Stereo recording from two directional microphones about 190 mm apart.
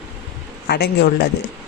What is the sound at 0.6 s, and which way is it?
Speech, 60° left (ahead or behind).